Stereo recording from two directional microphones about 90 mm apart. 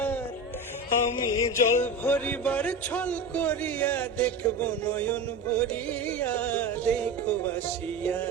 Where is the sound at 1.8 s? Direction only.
15° left (ahead or behind).